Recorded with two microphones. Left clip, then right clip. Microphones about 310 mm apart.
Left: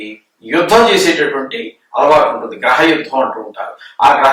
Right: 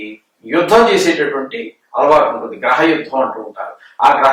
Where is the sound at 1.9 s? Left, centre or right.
Centre.